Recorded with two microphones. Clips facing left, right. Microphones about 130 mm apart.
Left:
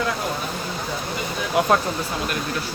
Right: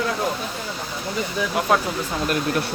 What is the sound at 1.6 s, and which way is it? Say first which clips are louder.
Speech: left 5 dB; centre (ahead or behind).